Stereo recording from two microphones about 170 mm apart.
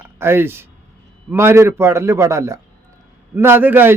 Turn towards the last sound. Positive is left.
turn(degrees=-10)  # may be behind; listen again after turning